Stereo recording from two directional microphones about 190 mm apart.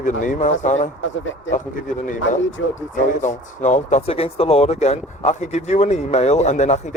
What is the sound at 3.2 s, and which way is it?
Speech, 40° left (ahead or behind).